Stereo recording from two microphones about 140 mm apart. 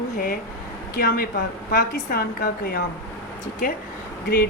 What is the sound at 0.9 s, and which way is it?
Speech, 90° left.